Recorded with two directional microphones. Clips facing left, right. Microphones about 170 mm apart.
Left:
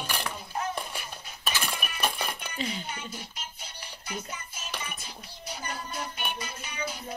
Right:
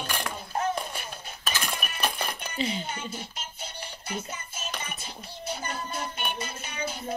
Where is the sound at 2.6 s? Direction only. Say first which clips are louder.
Right 4 dB; 25° right (ahead or behind).